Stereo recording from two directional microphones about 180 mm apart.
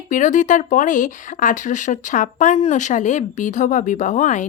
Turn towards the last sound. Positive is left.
turn(degrees=40)  # may be behind; listen again after turning